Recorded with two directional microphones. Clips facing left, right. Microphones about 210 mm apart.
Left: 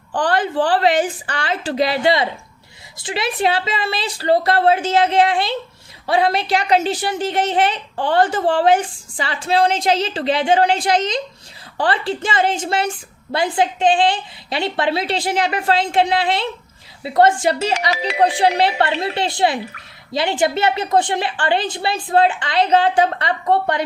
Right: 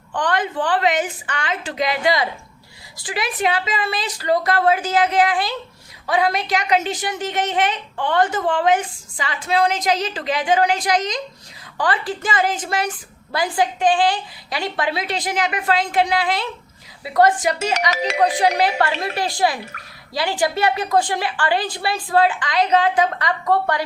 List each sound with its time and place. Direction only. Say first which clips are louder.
0.1 s a woman's voice: left 3 dB; 35° left (ahead or behind)